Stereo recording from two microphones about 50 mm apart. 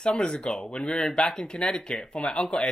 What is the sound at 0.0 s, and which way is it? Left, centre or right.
Speech, centre.